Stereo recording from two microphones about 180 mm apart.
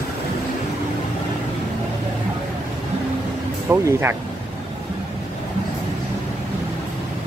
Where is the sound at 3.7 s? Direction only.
10° right (ahead or behind).